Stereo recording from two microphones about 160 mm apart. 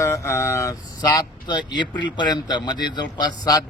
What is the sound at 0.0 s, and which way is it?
Speech, 15° left (ahead or behind).